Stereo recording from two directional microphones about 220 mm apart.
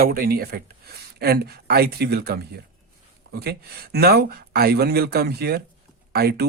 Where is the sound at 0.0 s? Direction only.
45° right (ahead or behind).